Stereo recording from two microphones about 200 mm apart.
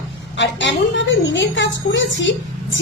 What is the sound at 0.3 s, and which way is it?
A woman's voice, 60° left (ahead or behind).